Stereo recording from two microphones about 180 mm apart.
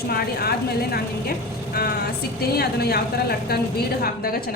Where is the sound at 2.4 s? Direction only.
60° left (ahead or behind).